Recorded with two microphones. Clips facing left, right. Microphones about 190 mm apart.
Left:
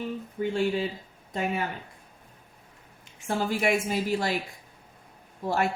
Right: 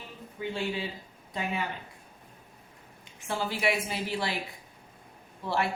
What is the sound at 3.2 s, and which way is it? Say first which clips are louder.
A woman's voice: left 4 dB; 45° left (ahead or behind).